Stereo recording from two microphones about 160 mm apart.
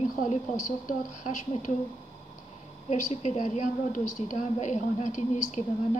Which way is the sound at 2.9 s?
45° left (ahead or behind).